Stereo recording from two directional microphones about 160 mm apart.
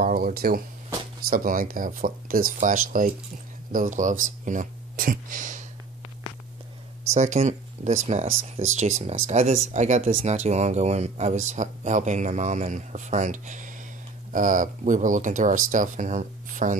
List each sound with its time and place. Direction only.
0.0 s speech: 65° right (ahead or behind)
7.2 s speech: 45° right (ahead or behind)